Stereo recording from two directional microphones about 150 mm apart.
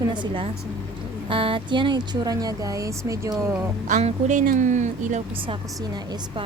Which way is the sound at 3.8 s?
55° right (ahead or behind).